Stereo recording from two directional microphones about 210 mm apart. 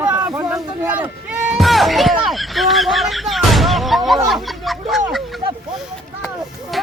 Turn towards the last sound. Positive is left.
turn(degrees=0)  # may be behind; listen again after turning